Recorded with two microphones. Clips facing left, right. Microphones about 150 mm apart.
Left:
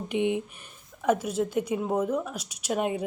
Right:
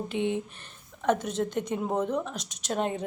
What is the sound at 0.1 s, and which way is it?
A woman's voice, 15° left (ahead or behind).